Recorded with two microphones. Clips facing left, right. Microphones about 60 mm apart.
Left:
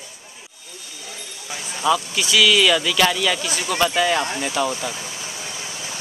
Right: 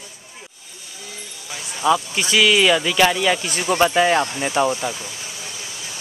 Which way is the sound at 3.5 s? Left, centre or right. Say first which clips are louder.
Right 3 dB; right.